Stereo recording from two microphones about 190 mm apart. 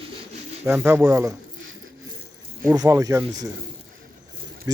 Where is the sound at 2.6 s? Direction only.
20° right (ahead or behind).